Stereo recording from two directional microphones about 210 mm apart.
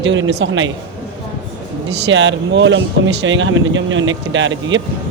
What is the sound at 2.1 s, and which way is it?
Speech, 60° right (ahead or behind).